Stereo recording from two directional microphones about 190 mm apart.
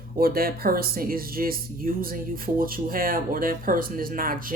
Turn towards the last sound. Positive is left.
turn(degrees=-50)  # may be behind; listen again after turning